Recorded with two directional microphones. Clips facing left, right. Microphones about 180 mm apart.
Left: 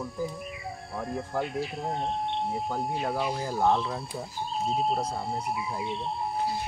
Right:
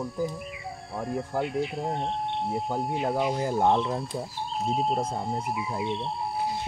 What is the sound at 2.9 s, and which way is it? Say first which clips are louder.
Speech: right 5 dB; 20° right (ahead or behind).